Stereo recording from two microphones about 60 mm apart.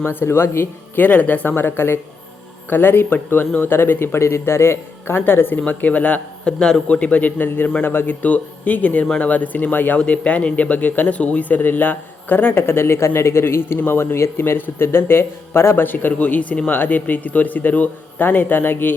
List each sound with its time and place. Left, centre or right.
0.1 s speech: left
1.0 s speech: left
5.5 s a man's voice: left
6.6 s a man's voice: centre; by 10.0 s left
10.0 s a man's voice: left
12.5 s speech: left